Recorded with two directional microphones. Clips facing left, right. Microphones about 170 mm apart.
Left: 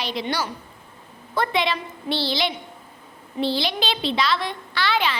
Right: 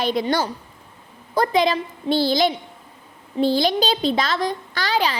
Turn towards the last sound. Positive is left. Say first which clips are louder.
# right 1 dB
turn(degrees=-40)  # may be behind; listen again after turning